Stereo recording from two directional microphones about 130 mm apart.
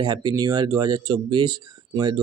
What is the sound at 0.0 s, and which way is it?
Speech, 35° right (ahead or behind).